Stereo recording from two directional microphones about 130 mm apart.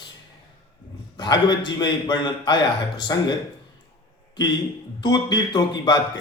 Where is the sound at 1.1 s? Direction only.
35° left (ahead or behind).